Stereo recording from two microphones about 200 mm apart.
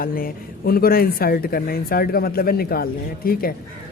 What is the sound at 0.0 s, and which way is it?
Speech, 45° left (ahead or behind).